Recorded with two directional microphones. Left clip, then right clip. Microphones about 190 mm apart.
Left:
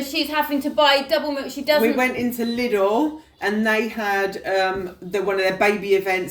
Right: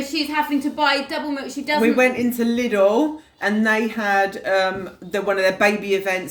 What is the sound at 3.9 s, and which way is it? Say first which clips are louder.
Speech: right 3 dB; 25° right (ahead or behind).